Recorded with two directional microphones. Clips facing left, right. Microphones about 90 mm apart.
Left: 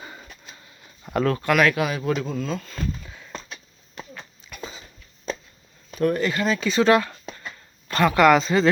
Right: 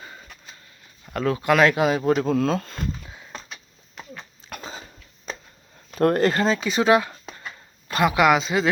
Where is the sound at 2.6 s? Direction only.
25° right (ahead or behind).